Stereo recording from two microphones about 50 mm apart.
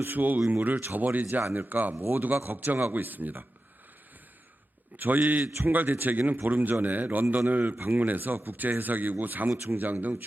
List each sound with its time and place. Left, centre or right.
0.0 s speech: right
1.4 s a man's voice: right
1.7 s a man's voice: right
4.9 s speech: right